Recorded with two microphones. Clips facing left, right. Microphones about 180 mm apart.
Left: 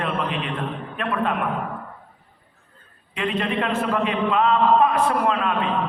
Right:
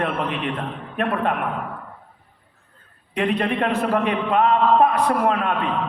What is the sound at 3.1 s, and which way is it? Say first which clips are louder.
A man's voice: right 3 dB; 60° right (ahead or behind).